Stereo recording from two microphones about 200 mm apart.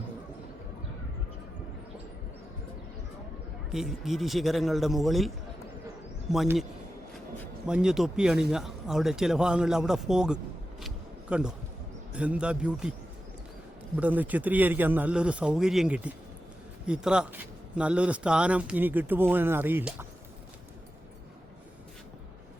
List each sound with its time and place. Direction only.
3.7 s speech: centre (ahead or behind)
6.3 s speech: centre (ahead or behind)
7.7 s speech: 5° right (ahead or behind)
10.8 s a sound: 5° right (ahead or behind)
12.1 s speech: 5° right (ahead or behind)
13.9 s speech: 10° right (ahead or behind)